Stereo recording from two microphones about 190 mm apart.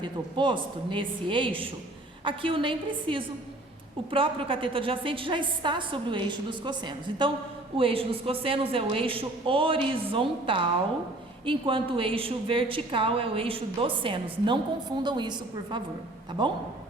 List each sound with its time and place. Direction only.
0.0 s a woman's voice: 25° right (ahead or behind)